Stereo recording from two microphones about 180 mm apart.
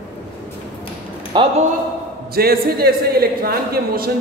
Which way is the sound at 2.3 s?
60° right (ahead or behind).